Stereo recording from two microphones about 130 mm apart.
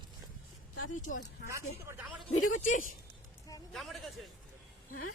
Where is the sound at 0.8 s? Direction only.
90° left.